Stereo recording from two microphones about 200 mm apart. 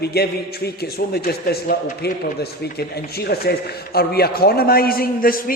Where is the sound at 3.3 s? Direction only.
50° left (ahead or behind).